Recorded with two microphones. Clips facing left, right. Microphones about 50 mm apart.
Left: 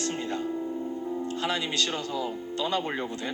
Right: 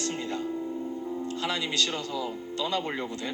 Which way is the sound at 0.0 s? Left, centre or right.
Left.